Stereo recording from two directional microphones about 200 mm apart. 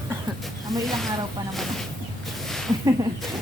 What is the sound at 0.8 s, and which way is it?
Speech, centre (ahead or behind).